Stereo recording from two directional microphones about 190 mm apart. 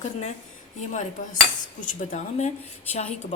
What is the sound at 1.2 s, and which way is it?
Cutlery, 40° left (ahead or behind).